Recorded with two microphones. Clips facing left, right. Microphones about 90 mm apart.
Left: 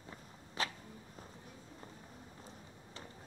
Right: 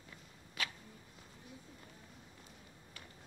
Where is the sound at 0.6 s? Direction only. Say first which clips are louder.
Left 3 dB; 30° left (ahead or behind).